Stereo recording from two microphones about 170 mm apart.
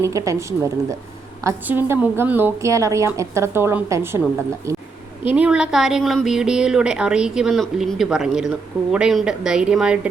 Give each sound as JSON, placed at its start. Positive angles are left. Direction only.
{"t": 0.0, "sound": "a woman's voice", "side_deg": -20}
{"t": 4.7, "sound": "a sound", "side_deg": -15}
{"t": 5.3, "sound": "speech", "side_deg": -5}